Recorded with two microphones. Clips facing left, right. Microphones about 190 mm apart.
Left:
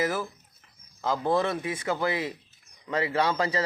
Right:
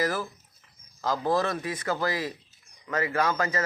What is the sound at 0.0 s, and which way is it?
Speech, 20° left (ahead or behind).